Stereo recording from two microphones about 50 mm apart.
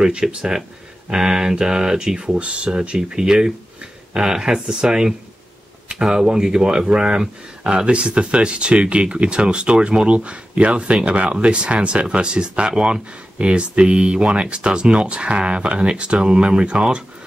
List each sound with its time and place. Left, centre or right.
0.0 s speech: centre